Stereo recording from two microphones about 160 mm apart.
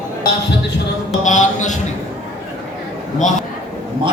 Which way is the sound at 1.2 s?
50° left (ahead or behind).